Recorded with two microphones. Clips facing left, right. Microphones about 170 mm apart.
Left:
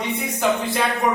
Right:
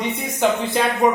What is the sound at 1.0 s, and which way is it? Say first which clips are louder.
Speech: right 5 dB; 20° right (ahead or behind).